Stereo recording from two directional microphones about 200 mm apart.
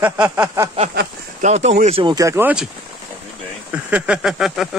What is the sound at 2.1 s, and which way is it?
Speech, 15° right (ahead or behind).